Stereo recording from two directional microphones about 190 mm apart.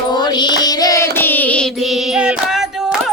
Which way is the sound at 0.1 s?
20° left (ahead or behind).